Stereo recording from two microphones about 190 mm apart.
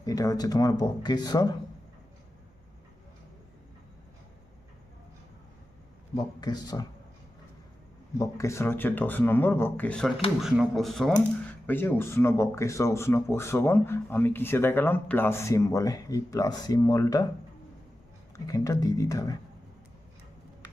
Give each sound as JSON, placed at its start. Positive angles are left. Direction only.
{"t": 0.0, "sound": "speech", "side_deg": 20}
{"t": 6.1, "sound": "speech", "side_deg": 20}
{"t": 8.2, "sound": "speech", "side_deg": 15}
{"t": 18.3, "sound": "speech", "side_deg": 20}